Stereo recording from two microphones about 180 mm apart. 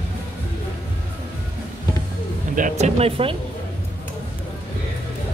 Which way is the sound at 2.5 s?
45° right (ahead or behind).